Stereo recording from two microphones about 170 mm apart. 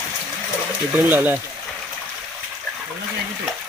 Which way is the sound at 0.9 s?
10° right (ahead or behind).